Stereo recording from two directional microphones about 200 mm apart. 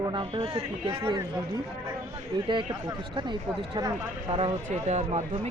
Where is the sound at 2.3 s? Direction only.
20° right (ahead or behind).